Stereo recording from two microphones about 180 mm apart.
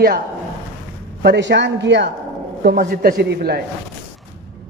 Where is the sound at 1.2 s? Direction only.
75° right (ahead or behind).